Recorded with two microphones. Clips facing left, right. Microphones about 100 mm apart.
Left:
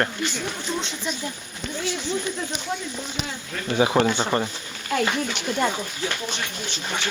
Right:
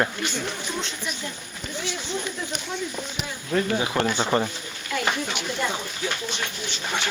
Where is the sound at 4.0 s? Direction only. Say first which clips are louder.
Left 4 dB; 20° left (ahead or behind).